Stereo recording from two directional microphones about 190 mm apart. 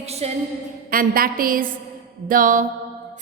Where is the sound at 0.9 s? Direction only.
50° right (ahead or behind).